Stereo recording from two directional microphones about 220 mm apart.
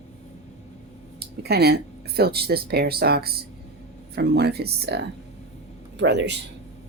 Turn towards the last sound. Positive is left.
turn(degrees=-50)  # may be behind; listen again after turning